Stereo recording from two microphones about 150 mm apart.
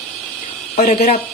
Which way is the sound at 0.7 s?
45° left (ahead or behind).